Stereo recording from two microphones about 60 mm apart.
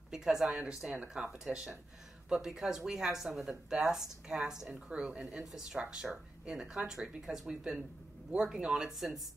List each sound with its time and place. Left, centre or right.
0.1 s speech: centre